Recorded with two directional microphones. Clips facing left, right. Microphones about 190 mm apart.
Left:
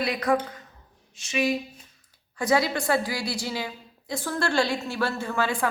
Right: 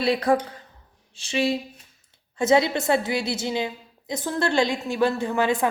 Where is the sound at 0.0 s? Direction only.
30° right (ahead or behind).